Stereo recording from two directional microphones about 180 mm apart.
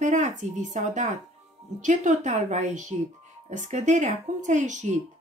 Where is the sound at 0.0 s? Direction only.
40° right (ahead or behind).